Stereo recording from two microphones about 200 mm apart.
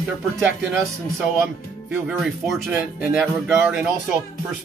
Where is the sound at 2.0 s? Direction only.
Centre (ahead or behind).